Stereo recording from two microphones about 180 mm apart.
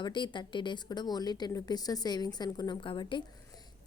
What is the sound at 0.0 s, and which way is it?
A woman's voice, 25° left (ahead or behind).